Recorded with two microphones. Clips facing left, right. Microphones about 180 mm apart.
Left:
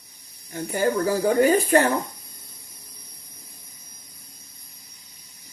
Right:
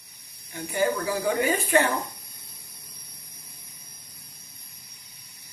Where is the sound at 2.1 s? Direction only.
65° right (ahead or behind).